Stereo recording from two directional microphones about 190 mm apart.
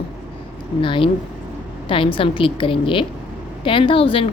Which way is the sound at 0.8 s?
25° left (ahead or behind).